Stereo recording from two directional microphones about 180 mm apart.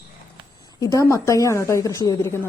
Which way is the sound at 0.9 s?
20° left (ahead or behind).